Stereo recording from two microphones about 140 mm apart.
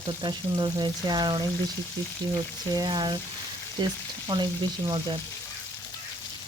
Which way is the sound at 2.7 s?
30° right (ahead or behind).